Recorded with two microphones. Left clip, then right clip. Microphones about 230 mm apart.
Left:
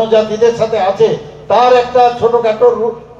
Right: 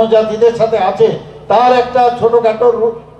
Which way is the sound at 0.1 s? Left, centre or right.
Right.